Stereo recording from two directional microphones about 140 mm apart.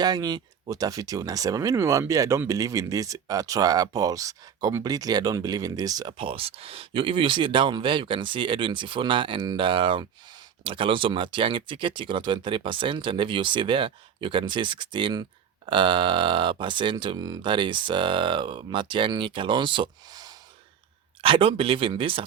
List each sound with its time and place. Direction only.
0.0 s speech: 30° right (ahead or behind)